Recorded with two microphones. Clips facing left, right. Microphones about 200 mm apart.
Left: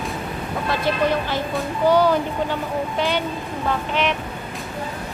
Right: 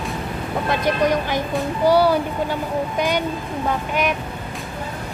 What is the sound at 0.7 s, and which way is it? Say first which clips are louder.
Speech: right 2 dB; 15° right (ahead or behind).